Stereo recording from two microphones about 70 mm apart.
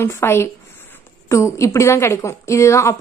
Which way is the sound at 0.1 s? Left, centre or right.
Left.